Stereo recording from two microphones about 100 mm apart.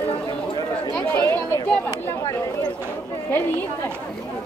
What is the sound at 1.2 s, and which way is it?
Chatter, 25° left (ahead or behind).